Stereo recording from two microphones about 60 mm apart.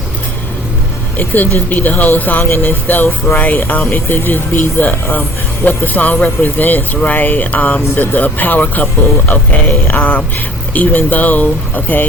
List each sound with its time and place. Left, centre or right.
1.1 s speech: left
2.4 s speech: left